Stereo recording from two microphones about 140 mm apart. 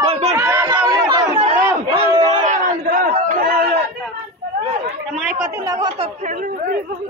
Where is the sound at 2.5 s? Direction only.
65° right (ahead or behind); by 3.7 s 90° right.